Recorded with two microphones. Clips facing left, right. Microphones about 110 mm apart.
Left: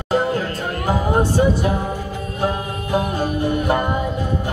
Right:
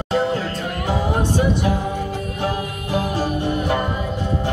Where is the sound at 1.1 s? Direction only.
30° left (ahead or behind).